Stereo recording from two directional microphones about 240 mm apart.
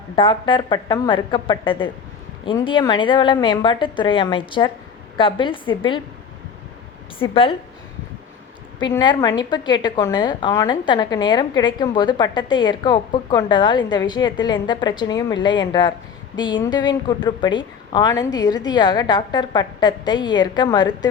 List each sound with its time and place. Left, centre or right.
0.2 s a woman's voice: left
7.2 s a woman's voice: left
8.8 s a woman's voice: centre